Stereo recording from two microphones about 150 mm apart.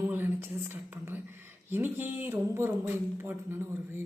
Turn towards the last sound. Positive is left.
turn(degrees=-15)  # may be behind; listen again after turning